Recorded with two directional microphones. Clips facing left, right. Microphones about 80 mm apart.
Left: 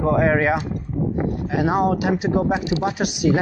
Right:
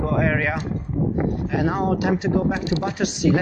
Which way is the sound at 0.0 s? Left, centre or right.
Left.